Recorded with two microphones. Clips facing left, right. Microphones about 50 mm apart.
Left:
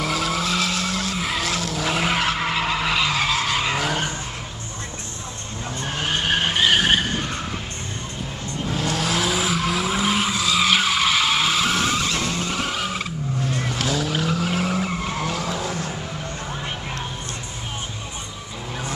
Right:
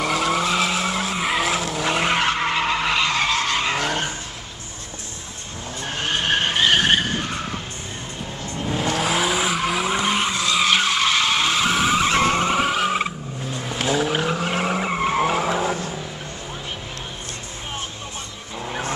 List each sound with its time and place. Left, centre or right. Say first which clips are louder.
0.0 s vehicle: right 3 dB; centre
5.9 s vehicle: right 1 dB; centre
8.6 s vehicle: right 2 dB; centre
12.0 s vehicle: right 6 dB; right
12.5 s vehicle: right 5 dB; centre; by 15.9 s right
18.7 s vehicle: right 3 dB; right